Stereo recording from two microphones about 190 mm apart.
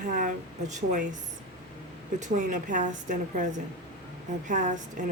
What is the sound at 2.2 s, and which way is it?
A woman's voice, 40° right (ahead or behind).